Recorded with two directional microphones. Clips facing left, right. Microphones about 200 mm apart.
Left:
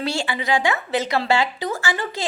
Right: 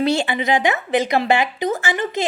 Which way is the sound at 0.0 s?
20° right (ahead or behind).